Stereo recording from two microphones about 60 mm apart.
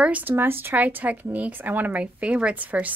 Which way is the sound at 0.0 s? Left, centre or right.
Right.